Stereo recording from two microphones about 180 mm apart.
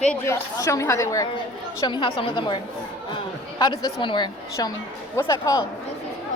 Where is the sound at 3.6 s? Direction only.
25° left (ahead or behind).